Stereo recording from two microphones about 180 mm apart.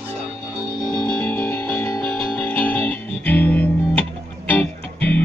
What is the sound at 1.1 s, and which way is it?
Music, 10° left (ahead or behind).